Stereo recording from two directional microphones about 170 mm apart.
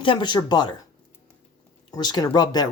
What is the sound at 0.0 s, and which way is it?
Speech, 30° left (ahead or behind).